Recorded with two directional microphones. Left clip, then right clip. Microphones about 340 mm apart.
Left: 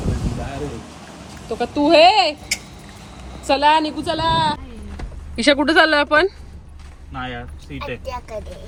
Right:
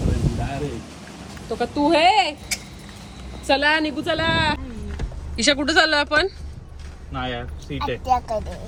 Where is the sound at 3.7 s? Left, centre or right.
Centre.